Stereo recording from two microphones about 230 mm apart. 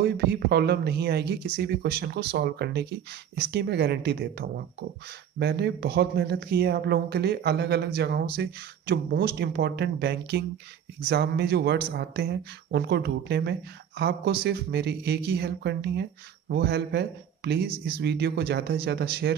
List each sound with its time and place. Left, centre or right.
0.0 s speech: right